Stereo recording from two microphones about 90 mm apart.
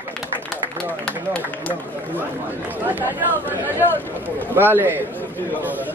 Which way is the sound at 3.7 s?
20° left (ahead or behind).